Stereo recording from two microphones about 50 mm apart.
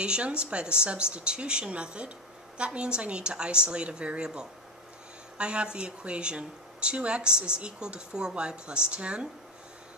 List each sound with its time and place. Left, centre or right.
0.0 s speech: right